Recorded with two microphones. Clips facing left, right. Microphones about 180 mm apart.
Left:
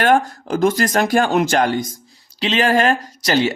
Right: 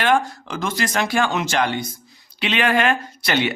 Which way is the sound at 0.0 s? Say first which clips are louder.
Left 3 dB; 45° left (ahead or behind).